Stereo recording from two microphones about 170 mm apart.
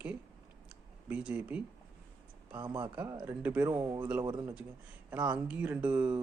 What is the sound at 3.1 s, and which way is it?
Speech, 20° right (ahead or behind).